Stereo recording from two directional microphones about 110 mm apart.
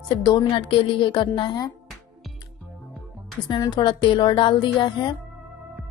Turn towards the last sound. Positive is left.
turn(degrees=45)  # may be behind; listen again after turning